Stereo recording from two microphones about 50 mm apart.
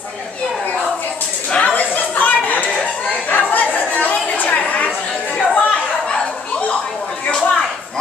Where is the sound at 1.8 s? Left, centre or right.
Left.